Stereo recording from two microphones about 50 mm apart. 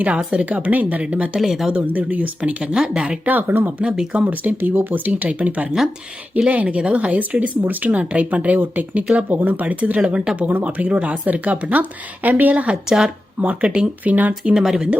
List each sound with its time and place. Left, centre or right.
0.3 s speech: right
1.4 s speech: centre
1.9 s speech: right
2.7 s speech: centre
3.2 s speech: right
3.8 s speech: right
10.0 s speech: centre
10.4 s speech: right
12.6 s speech: centre
14.0 s speech: right
14.5 s speech: centre